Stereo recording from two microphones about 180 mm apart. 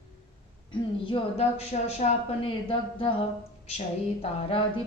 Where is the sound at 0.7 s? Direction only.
30° left (ahead or behind).